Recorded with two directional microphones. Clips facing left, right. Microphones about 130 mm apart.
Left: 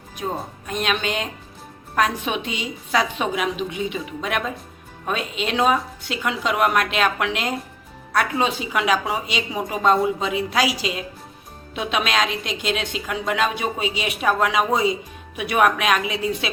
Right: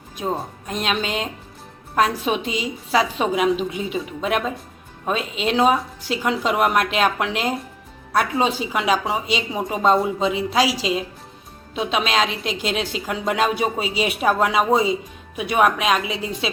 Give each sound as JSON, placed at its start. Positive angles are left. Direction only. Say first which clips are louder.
{"t": 0.7, "sound": "a woman's voice", "louder": "even", "side_deg": -35}
{"t": 9.9, "sound": "speech", "louder": "even", "side_deg": 0}
{"t": 10.2, "sound": "a woman's voice", "louder": "right 2 dB", "side_deg": -25}